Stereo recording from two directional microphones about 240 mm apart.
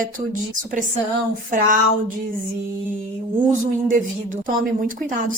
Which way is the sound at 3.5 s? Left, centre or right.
Right.